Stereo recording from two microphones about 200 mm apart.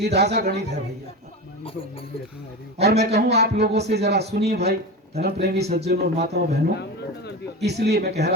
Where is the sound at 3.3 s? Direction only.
55° right (ahead or behind).